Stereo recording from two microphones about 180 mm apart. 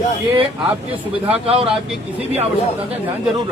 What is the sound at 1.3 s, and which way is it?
Speech, 35° right (ahead or behind).